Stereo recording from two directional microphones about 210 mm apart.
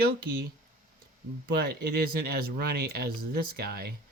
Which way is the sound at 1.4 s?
45° right (ahead or behind).